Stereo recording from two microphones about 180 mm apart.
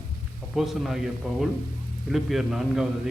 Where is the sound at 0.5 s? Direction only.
Centre (ahead or behind).